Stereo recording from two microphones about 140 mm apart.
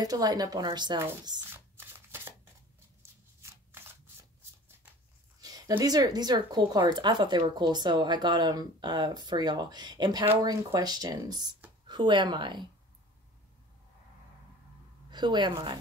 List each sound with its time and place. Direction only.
0.0 s speech: 25° right (ahead or behind)
1.5 s shuffling cards: 15° right (ahead or behind)
5.4 s speech: 25° right (ahead or behind)
15.0 s a woman's voice: 30° right (ahead or behind)